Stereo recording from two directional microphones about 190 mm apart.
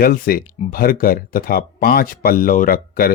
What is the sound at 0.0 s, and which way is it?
Speech, 50° left (ahead or behind).